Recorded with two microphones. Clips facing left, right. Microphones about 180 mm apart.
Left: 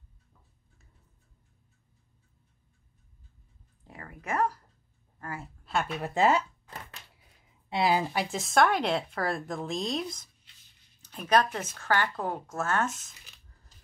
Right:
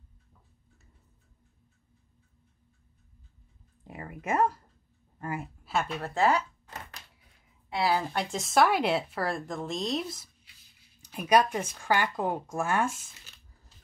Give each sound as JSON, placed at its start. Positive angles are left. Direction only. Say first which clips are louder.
{"t": 3.8, "sound": "a woman's voice", "louder": "right 4 dB", "side_deg": -20}
{"t": 5.6, "sound": "a sound", "louder": "left 1 dB", "side_deg": 0}
{"t": 5.9, "sound": "speech", "louder": "left 2 dB", "side_deg": 15}
{"t": 7.7, "sound": "speech", "louder": "left 1 dB", "side_deg": 20}
{"t": 11.0, "sound": "a sound", "louder": "right 2 dB", "side_deg": -10}
{"t": 11.5, "sound": "speech", "louder": "right 1 dB", "side_deg": -10}